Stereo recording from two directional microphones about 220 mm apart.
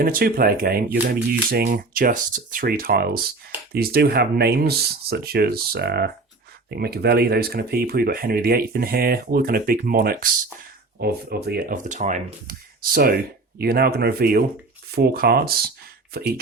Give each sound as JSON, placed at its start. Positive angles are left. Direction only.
{"t": 0.0, "sound": "speech", "side_deg": -40}